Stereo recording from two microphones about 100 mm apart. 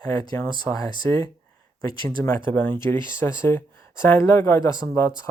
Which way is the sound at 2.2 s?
20° left (ahead or behind).